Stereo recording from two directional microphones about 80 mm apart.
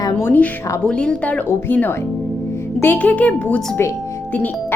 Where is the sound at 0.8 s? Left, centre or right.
Centre.